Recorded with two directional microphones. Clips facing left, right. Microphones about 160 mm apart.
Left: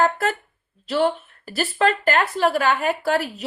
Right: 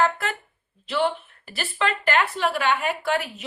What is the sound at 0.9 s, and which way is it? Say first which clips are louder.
Speech: left 3 dB; 40° left (ahead or behind).